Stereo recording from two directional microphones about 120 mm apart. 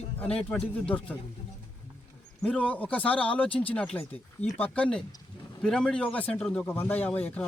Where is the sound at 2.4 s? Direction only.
10° left (ahead or behind).